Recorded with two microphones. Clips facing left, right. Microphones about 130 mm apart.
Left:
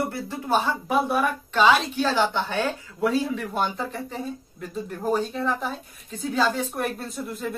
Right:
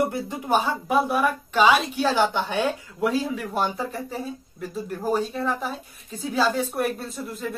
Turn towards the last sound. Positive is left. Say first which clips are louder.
# left 1 dB
turn(degrees=0)  # may be behind; listen again after turning